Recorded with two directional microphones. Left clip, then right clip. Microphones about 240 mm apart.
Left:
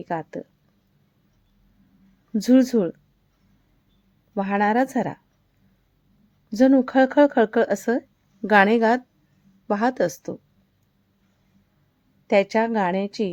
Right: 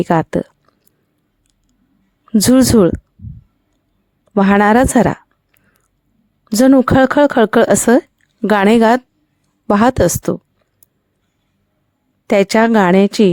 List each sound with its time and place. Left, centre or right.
0.0 s speech: right
2.3 s speech: right
4.4 s speech: right
6.5 s speech: right
12.3 s a woman's voice: right